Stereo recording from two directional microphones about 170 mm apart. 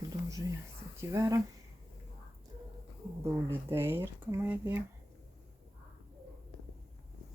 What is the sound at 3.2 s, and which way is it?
Speech, 15° right (ahead or behind).